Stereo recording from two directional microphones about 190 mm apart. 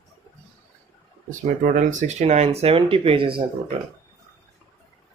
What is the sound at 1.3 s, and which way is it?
Speech, 45° right (ahead or behind).